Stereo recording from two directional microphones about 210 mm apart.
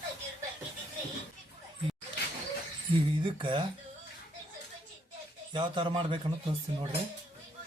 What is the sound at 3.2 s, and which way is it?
Speech, 25° right (ahead or behind).